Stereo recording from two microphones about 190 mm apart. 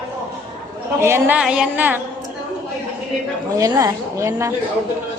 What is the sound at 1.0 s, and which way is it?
A woman's voice, 10° right (ahead or behind).